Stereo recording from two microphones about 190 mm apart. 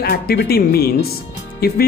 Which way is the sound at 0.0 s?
60° left (ahead or behind).